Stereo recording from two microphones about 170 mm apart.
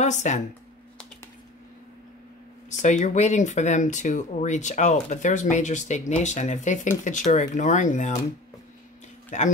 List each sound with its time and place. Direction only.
0.0 s speech: 45° left (ahead or behind)
2.7 s speech: 45° left (ahead or behind)
9.3 s speech: 45° left (ahead or behind)